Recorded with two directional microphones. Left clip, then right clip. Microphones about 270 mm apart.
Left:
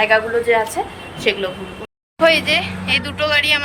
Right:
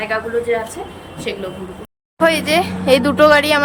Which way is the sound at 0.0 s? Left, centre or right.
Centre.